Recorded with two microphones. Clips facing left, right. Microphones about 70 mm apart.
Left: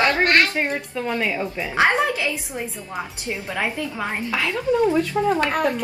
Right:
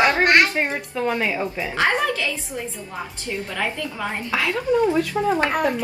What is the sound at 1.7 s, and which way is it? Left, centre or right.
A woman's voice, centre.